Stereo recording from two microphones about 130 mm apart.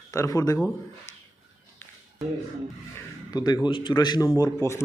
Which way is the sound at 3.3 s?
30° left (ahead or behind).